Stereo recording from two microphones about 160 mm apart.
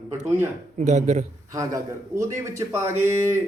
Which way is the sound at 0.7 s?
45° right (ahead or behind).